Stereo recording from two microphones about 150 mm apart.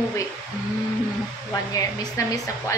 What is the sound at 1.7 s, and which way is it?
A man's voice, 25° left (ahead or behind).